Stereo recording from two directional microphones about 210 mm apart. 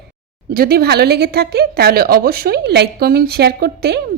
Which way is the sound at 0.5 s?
45° right (ahead or behind).